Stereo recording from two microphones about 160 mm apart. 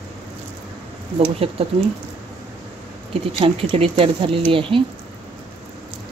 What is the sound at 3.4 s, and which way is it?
Speech, 35° right (ahead or behind).